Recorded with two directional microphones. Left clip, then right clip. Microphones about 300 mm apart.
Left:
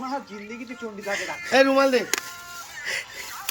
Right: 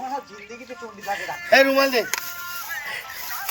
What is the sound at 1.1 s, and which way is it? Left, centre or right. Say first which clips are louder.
Speech: right 5 dB; centre.